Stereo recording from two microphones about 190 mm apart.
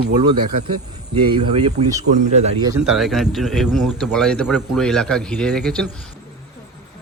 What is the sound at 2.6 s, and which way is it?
Speech, 20° right (ahead or behind).